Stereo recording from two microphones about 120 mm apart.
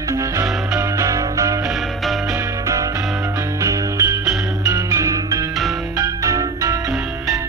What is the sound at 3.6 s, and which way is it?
Music, 25° right (ahead or behind).